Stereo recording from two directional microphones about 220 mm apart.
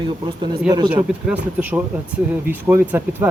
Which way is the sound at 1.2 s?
5° right (ahead or behind).